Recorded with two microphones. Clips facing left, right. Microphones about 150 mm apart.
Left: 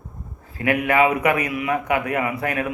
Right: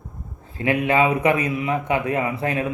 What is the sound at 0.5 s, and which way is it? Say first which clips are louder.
Speech: even; 25° right (ahead or behind).